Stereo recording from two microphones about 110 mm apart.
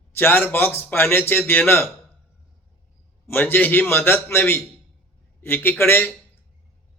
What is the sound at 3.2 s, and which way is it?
A man's voice, 20° left (ahead or behind).